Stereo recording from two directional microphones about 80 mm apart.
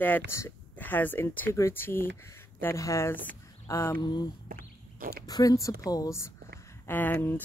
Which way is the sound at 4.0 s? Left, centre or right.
Left.